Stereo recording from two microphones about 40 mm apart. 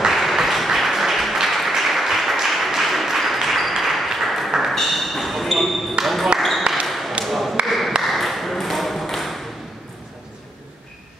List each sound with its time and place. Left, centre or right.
0.0 s applause: centre
4.2 s ping: centre
4.6 s a sound: centre
6.7 s basketball bounce: right
7.2 s tap: centre
7.6 s a sound: centre
8.0 s ping: centre